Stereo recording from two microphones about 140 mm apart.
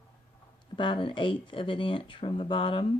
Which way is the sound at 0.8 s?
35° left (ahead or behind).